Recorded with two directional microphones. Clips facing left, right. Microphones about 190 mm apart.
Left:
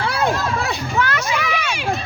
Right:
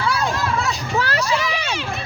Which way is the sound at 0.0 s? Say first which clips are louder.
Left 2 dB; 55° left (ahead or behind).